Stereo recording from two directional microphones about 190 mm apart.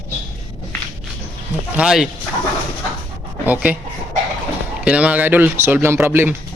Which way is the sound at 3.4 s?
10° right (ahead or behind).